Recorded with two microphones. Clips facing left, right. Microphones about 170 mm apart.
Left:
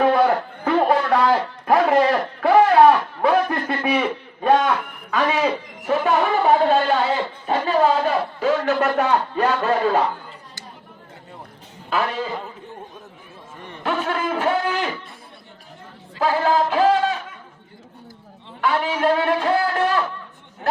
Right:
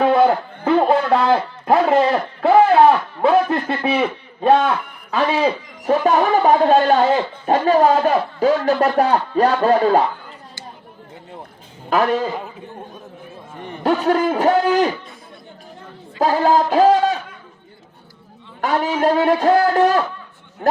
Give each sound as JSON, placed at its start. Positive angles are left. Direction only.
{"t": 0.6, "sound": "a sound", "side_deg": -25}
{"t": 5.1, "sound": "a man's voice", "side_deg": -30}
{"t": 11.9, "sound": "a man's voice", "side_deg": -40}
{"t": 13.8, "sound": "speech", "side_deg": -40}
{"t": 16.2, "sound": "speech", "side_deg": -40}
{"t": 18.6, "sound": "a man's voice", "side_deg": -45}